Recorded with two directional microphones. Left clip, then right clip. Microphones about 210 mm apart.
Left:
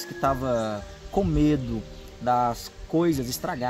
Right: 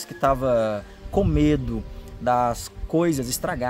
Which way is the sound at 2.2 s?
30° right (ahead or behind).